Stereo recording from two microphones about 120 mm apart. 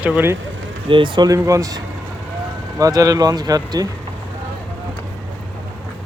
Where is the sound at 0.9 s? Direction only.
40° right (ahead or behind).